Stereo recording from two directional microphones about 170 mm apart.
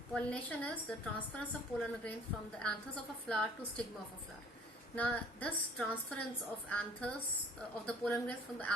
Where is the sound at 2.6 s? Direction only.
5° left (ahead or behind).